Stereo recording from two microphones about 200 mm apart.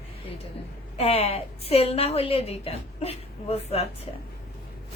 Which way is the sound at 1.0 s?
30° left (ahead or behind).